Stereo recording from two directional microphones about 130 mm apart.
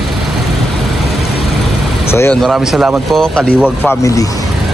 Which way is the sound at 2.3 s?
Centre (ahead or behind).